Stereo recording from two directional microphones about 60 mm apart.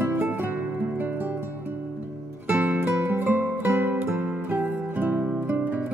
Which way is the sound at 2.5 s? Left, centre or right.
Right.